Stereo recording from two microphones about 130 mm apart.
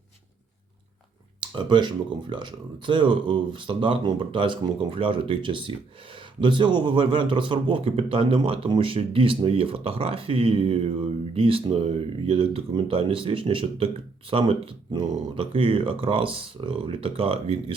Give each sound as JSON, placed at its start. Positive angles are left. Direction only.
{"t": 1.4, "sound": "speech", "side_deg": -35}